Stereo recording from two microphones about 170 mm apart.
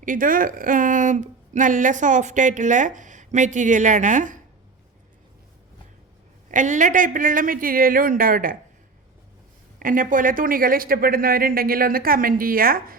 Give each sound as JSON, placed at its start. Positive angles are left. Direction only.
{"t": 0.0, "sound": "speech", "side_deg": -50}
{"t": 6.5, "sound": "speech", "side_deg": -50}
{"t": 9.7, "sound": "speech", "side_deg": -55}